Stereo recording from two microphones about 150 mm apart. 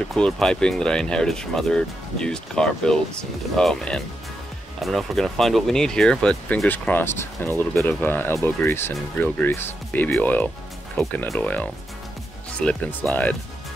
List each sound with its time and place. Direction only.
0.1 s speech: 5° left (ahead or behind)